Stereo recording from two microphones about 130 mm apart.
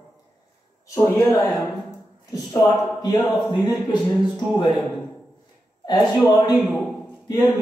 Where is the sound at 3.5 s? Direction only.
35° left (ahead or behind).